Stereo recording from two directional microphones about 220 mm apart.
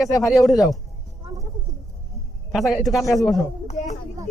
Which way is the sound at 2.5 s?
Centre (ahead or behind).